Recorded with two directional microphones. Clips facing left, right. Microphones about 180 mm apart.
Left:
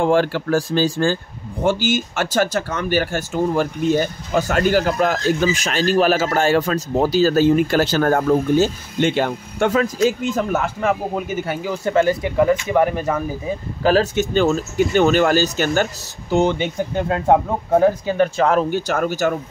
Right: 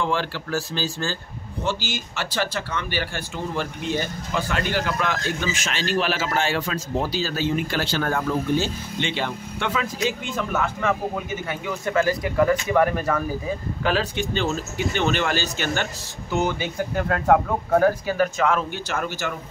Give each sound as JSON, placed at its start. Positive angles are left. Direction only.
{"t": 0.0, "sound": "speech", "side_deg": 50}
{"t": 13.8, "sound": "speech", "side_deg": 45}
{"t": 16.3, "sound": "speech", "side_deg": 25}